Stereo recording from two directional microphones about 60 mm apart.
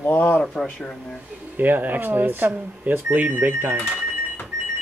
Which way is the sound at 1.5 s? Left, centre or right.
Right.